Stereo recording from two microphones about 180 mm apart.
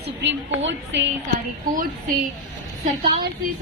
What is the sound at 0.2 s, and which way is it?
Speech, 85° right.